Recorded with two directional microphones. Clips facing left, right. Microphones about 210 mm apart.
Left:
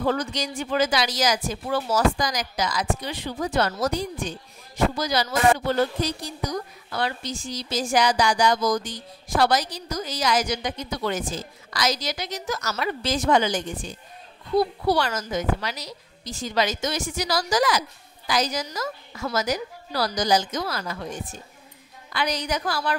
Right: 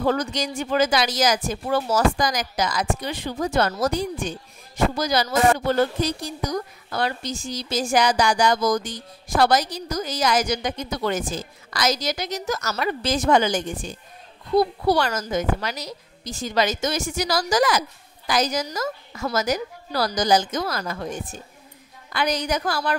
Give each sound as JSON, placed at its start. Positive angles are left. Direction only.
{"t": 0.0, "sound": "a woman's voice", "side_deg": -45}
{"t": 4.9, "sound": "a woman's voice", "side_deg": -45}
{"t": 14.9, "sound": "a woman's voice", "side_deg": -45}
{"t": 22.1, "sound": "a woman's voice", "side_deg": -50}